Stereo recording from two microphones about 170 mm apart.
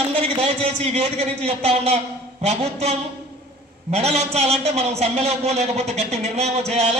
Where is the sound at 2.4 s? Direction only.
40° right (ahead or behind).